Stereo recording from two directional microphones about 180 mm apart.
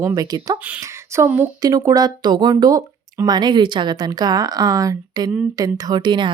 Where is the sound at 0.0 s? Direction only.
20° right (ahead or behind).